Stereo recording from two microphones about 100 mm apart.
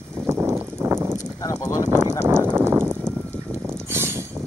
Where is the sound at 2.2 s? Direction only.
25° right (ahead or behind).